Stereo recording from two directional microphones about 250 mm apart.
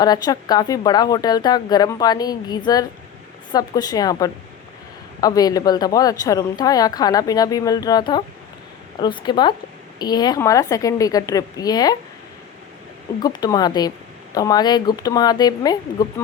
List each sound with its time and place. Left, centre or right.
0.0 s a woman's voice: centre
13.2 s a woman's voice: centre